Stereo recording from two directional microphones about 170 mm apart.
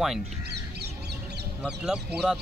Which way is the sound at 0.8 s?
70° right (ahead or behind).